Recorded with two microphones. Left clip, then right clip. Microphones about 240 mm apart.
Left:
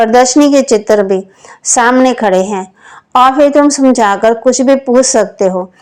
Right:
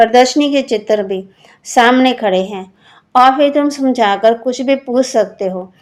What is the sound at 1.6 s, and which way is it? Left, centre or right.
A woman's voice, left.